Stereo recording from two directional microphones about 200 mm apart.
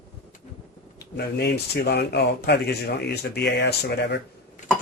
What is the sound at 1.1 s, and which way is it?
Speech, 55° left (ahead or behind).